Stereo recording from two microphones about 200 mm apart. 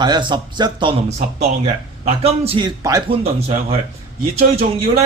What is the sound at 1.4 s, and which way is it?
A man's voice, 35° right (ahead or behind).